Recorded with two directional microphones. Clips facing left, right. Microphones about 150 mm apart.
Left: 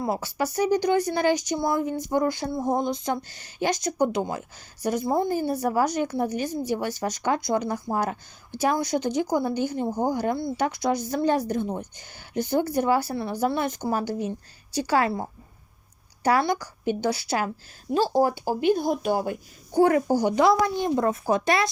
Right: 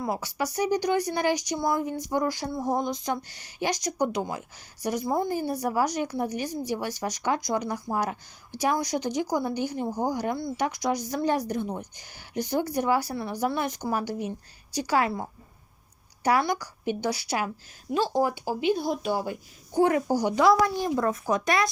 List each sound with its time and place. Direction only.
0.0 s speech: 30° left (ahead or behind); by 19.4 s 55° left (ahead or behind)
19.7 s speech: 35° left (ahead or behind)